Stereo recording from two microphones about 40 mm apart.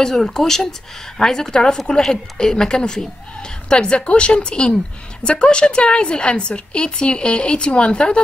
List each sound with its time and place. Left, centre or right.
0.0 s speech: centre